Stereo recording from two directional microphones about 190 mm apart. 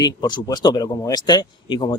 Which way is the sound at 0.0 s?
20° left (ahead or behind).